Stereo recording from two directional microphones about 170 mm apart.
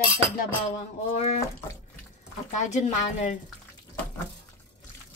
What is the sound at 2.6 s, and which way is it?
Speech, 45° left (ahead or behind).